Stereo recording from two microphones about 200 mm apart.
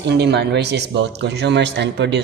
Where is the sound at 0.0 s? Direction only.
55° right (ahead or behind).